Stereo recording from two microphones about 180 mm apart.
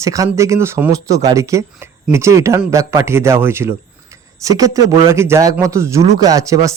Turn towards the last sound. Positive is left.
turn(degrees=-20)  # may be behind; listen again after turning